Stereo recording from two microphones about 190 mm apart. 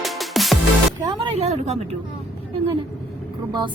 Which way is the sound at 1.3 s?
35° right (ahead or behind).